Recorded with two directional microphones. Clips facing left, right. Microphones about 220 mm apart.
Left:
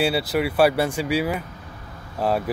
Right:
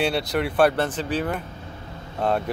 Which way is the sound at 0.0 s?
5° left (ahead or behind).